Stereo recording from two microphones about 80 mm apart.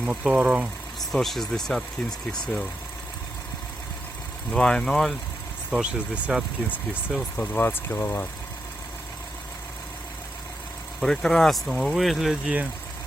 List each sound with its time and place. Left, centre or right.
0.0 s speech: centre
0.9 s speech: centre
4.5 s speech: centre
5.7 s speech: centre
7.5 s speech: left
11.0 s speech: centre